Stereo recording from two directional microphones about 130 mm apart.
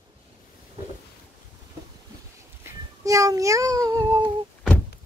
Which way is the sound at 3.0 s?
25° right (ahead or behind).